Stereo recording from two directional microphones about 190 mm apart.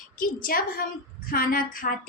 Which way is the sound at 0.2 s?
50° left (ahead or behind).